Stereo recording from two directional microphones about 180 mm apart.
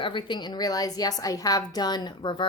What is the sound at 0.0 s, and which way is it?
A woman's voice, 25° left (ahead or behind).